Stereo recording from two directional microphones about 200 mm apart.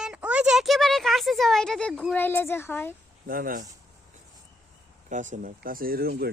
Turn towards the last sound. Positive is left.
turn(degrees=-50)  # may be behind; listen again after turning